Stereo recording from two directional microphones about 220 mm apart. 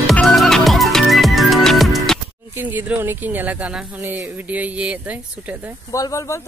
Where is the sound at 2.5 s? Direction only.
10° right (ahead or behind).